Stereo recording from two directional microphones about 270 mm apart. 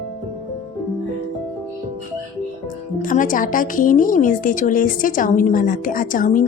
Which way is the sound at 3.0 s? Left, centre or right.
Left.